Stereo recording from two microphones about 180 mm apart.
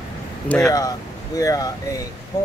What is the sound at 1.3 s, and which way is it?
Speech, 20° left (ahead or behind).